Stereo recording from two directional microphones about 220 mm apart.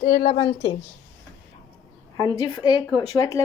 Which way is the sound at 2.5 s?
20° left (ahead or behind).